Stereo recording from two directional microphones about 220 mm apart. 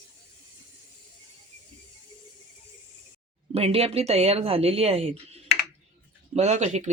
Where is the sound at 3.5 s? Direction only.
25° right (ahead or behind).